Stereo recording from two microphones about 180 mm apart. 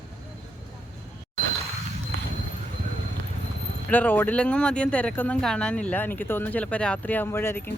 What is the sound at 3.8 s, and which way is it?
Speech, 10° left (ahead or behind).